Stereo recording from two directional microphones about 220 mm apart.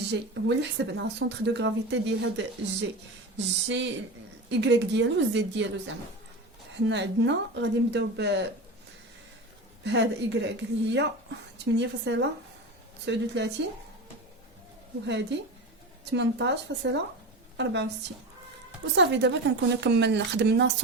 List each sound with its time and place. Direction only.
0.1 s a woman's voice: 50° right (ahead or behind)
6.7 s speech: 55° right (ahead or behind)
9.8 s speech: 50° right (ahead or behind)
15.0 s speech: 50° right (ahead or behind)
18.9 s speech: 55° right (ahead or behind)